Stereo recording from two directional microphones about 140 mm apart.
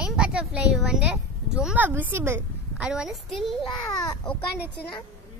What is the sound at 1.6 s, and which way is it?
A woman's voice, 10° right (ahead or behind).